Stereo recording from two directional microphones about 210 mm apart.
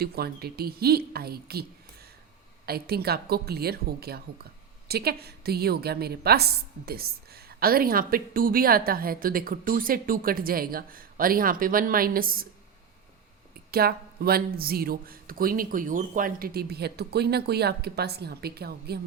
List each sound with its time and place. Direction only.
0.0 s a woman's voice: 45° right (ahead or behind)
2.6 s a woman's voice: 50° right (ahead or behind)
13.7 s a woman's voice: 45° right (ahead or behind)